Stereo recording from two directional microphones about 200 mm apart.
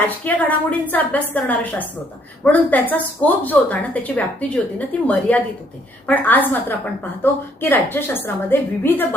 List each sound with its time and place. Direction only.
0.3 s a woman's voice: 5° left (ahead or behind)